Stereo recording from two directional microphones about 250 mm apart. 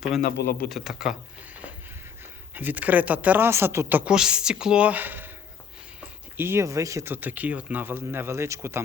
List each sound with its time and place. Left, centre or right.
0.2 s speech: left
0.7 s speech: centre
2.6 s speech: centre
6.3 s speech: centre